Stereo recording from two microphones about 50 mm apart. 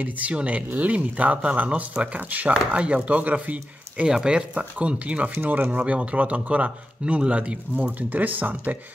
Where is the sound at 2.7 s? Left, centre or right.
Right.